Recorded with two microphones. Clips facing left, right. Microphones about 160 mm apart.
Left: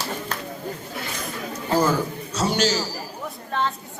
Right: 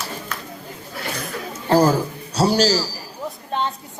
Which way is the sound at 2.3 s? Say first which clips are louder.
Right 5 dB; 35° right (ahead or behind).